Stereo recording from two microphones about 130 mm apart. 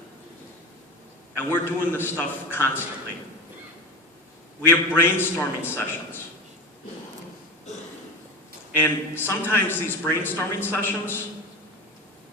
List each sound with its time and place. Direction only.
1.4 s a man's voice: 15° left (ahead or behind)
4.6 s a man's voice: 15° left (ahead or behind)
8.7 s a man's voice: 15° left (ahead or behind)